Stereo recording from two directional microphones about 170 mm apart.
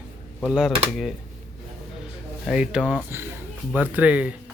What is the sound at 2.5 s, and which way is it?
Speech, 5° right (ahead or behind).